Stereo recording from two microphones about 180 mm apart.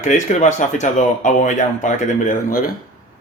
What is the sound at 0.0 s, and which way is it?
A man's voice, 40° left (ahead or behind).